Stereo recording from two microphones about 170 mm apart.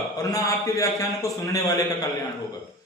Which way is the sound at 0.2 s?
20° left (ahead or behind).